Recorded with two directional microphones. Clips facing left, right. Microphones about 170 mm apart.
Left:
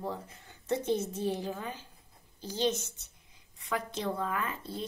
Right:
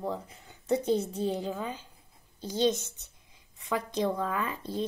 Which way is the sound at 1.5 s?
20° right (ahead or behind).